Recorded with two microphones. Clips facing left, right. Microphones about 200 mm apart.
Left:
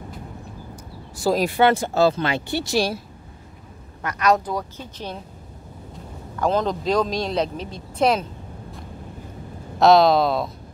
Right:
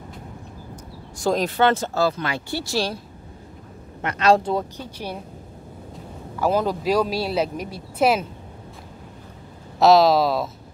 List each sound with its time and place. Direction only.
1.1 s speech: 5° left (ahead or behind)
2.0 s speech: 25° left (ahead or behind)
4.0 s speech: 25° right (ahead or behind)
4.7 s speech: 10° right (ahead or behind)
6.3 s speech: 10° right (ahead or behind)
9.8 s speech: centre (ahead or behind)